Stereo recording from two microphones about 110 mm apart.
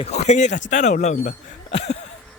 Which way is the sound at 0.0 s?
90° left.